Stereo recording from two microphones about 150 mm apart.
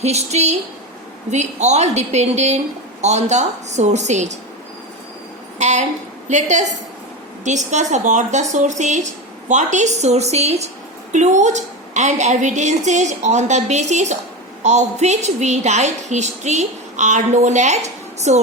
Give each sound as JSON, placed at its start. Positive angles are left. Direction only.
{"t": 0.0, "sound": "a woman's voice", "side_deg": -45}
{"t": 5.5, "sound": "a woman's voice", "side_deg": -50}